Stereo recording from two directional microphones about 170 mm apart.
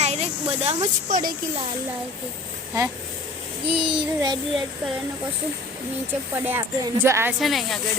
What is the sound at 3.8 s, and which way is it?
Speech, 30° right (ahead or behind).